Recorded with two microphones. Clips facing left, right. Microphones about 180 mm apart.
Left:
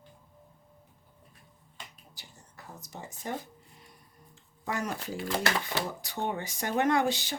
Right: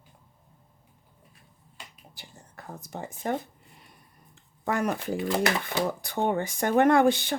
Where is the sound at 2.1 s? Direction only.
55° right (ahead or behind).